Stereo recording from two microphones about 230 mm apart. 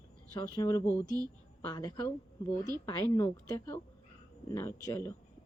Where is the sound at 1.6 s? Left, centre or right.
Centre.